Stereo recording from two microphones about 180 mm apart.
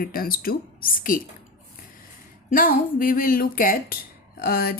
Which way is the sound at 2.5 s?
50° left (ahead or behind).